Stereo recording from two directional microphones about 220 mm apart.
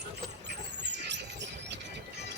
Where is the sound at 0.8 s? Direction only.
50° right (ahead or behind).